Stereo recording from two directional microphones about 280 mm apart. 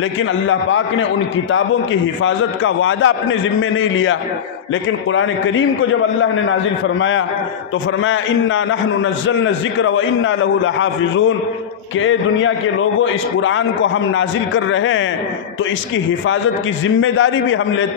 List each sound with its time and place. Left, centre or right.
0.5 s a man's voice: left
2.2 s a man's voice: left
16.8 s a man's voice: left